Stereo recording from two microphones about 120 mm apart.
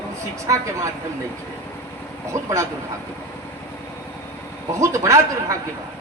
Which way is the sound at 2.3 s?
25° right (ahead or behind).